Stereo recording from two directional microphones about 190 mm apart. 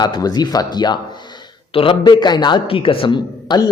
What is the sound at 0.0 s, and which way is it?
A man's voice, 20° left (ahead or behind).